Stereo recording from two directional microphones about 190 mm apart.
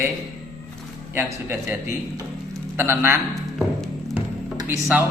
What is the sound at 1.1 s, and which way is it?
Speech, 10° right (ahead or behind).